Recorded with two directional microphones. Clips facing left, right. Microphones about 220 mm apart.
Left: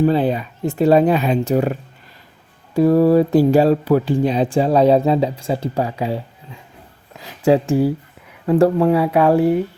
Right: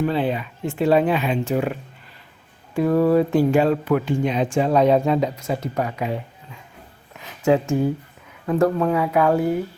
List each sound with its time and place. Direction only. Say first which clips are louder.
0.0 s speech: left 5 dB; 40° left (ahead or behind)
2.7 s speech: left 4 dB; 35° left (ahead or behind)